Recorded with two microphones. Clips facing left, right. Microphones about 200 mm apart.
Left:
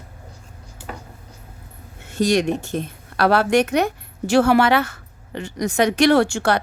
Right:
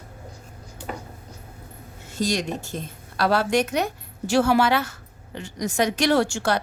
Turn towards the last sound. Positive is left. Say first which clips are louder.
# left 4 dB
turn(degrees=65)  # may be behind; listen again after turning